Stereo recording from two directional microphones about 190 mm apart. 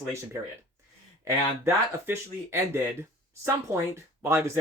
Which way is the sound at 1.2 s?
15° right (ahead or behind).